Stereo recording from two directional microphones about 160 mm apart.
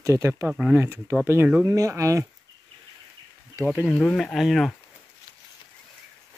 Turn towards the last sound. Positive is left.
turn(degrees=0)  # may be behind; listen again after turning